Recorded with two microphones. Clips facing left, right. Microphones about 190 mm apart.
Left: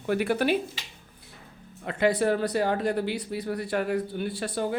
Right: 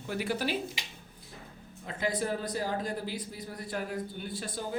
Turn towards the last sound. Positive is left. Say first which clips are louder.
# left 7 dB
turn(degrees=70)  # may be behind; listen again after turning